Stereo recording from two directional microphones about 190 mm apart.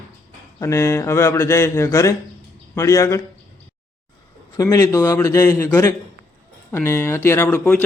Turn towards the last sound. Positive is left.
turn(degrees=5)  # may be behind; listen again after turning